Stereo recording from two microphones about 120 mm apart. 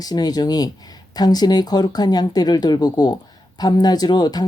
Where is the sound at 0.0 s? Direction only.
35° left (ahead or behind).